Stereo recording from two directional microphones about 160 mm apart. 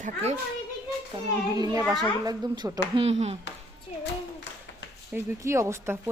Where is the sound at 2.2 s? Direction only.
25° right (ahead or behind).